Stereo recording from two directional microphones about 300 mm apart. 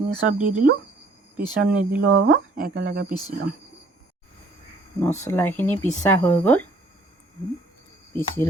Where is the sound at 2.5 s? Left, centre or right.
Right.